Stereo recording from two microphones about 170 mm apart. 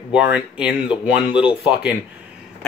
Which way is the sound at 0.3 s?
5° right (ahead or behind).